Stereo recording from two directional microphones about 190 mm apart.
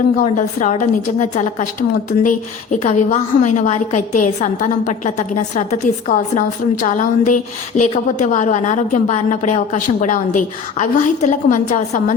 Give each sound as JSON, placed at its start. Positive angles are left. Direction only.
{"t": 0.2, "sound": "a woman's voice", "side_deg": 40}